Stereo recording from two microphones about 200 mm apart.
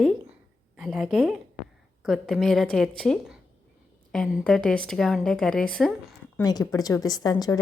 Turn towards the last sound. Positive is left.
turn(degrees=20)  # may be behind; listen again after turning